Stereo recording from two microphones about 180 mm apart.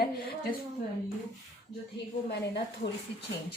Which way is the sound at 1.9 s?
70° left (ahead or behind).